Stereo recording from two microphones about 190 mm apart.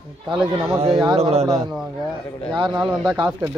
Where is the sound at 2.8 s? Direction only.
5° right (ahead or behind).